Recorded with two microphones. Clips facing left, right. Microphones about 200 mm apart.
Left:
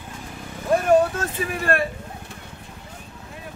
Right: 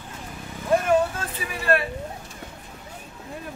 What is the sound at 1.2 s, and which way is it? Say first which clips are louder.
Speech: left 4 dB; 45° left (ahead or behind).